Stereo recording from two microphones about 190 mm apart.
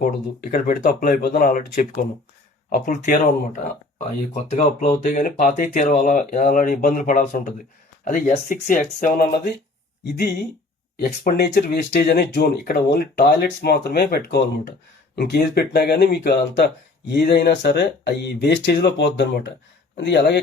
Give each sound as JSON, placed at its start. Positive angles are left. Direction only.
{"t": 0.5, "sound": "speech", "side_deg": 45}
{"t": 11.2, "sound": "speech", "side_deg": 55}